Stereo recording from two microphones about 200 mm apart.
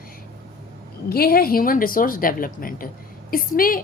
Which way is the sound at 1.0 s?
50° left (ahead or behind).